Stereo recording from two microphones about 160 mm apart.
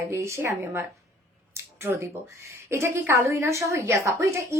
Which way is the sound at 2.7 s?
15° right (ahead or behind).